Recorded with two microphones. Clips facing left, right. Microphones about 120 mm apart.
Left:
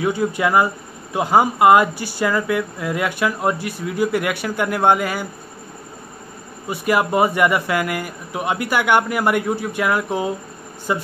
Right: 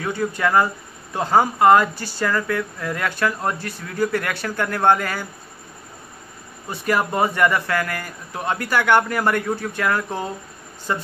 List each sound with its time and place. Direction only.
0.0 s speech: 15° left (ahead or behind)
6.7 s speech: 10° left (ahead or behind)